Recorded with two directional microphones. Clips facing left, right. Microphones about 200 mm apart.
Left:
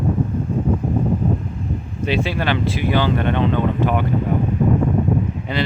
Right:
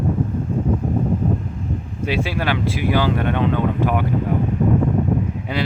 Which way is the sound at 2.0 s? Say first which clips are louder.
Left 1 dB; 10° right (ahead or behind).